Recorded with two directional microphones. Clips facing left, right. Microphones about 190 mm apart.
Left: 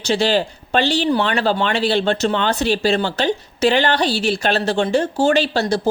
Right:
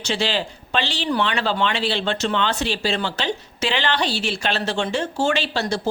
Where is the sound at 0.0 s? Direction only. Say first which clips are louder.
Left 6 dB; 40° left (ahead or behind).